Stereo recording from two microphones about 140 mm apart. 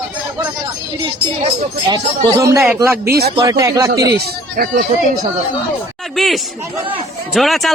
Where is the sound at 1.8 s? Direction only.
30° right (ahead or behind).